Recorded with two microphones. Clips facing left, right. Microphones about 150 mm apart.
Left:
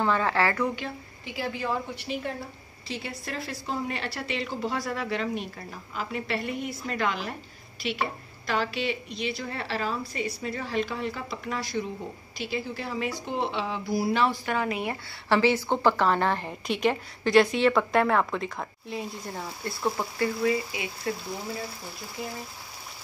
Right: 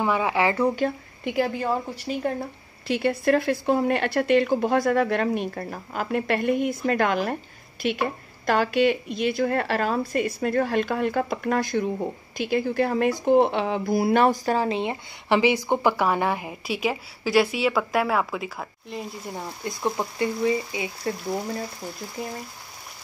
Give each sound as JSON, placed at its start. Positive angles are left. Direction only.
{"t": 0.0, "sound": "speech", "side_deg": -10}
{"t": 0.7, "sound": "speech", "side_deg": -50}
{"t": 2.9, "sound": "speech", "side_deg": -60}